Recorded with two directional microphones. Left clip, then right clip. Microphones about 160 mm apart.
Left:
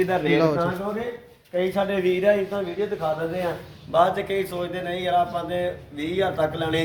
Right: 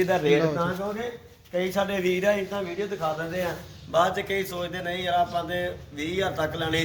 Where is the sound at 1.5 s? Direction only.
5° left (ahead or behind).